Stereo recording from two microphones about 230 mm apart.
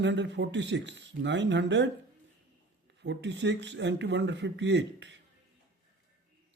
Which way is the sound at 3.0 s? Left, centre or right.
Right.